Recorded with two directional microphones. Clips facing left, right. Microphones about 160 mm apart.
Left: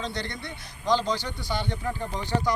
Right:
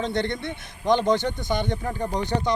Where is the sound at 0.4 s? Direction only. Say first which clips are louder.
Right 5 dB; 20° right (ahead or behind).